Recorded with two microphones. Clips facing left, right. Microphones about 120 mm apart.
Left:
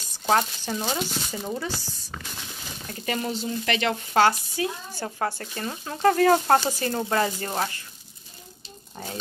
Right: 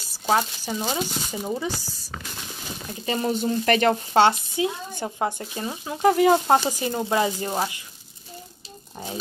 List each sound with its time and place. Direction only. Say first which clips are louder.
0.1 s speech: even; 5° right (ahead or behind)
3.3 s speech: right 10 dB; 45° right (ahead or behind)
4.1 s speech: left 2 dB; 25° right (ahead or behind)